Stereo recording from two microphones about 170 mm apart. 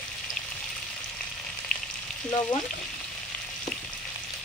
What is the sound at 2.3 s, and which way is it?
Frying, 25° left (ahead or behind).